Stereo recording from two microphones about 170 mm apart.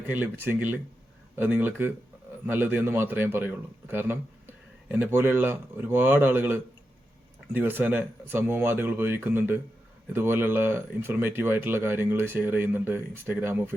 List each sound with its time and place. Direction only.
0.1 s a man's voice: 10° right (ahead or behind)